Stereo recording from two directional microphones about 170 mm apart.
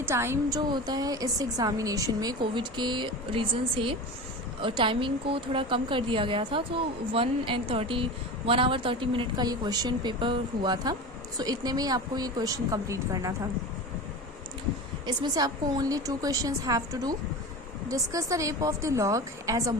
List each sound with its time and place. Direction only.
0.0 s a woman's voice: 15° right (ahead or behind)
15.0 s speech: 25° right (ahead or behind)